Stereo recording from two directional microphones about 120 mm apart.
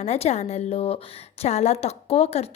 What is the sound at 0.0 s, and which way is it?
A woman's voice, 65° left (ahead or behind).